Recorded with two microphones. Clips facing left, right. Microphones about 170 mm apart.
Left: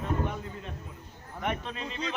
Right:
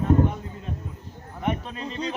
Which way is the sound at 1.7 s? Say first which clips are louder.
Right 5 dB; 40° right (ahead or behind).